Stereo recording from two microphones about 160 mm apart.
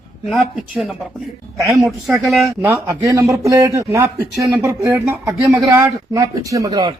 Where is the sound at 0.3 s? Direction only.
Centre (ahead or behind).